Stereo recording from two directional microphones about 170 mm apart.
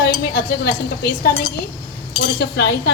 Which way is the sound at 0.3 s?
65° left (ahead or behind).